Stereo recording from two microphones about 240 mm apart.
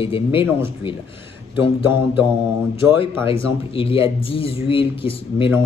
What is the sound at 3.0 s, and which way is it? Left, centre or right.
Speech, left.